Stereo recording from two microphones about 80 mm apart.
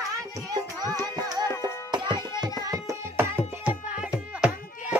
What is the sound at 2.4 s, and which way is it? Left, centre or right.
Tabla, right.